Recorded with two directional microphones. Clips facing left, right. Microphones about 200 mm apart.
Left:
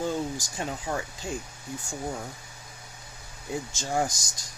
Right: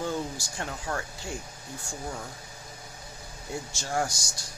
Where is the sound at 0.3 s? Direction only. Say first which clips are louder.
Left 3 dB; 15° left (ahead or behind).